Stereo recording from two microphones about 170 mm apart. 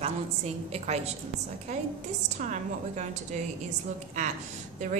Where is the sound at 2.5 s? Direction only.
45° right (ahead or behind).